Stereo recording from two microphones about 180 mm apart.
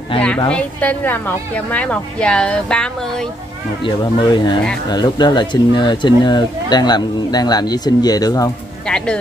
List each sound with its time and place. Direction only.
0.5 s a woman's voice: 5° left (ahead or behind)
3.8 s speech: 25° left (ahead or behind)
8.8 s speech: 5° left (ahead or behind)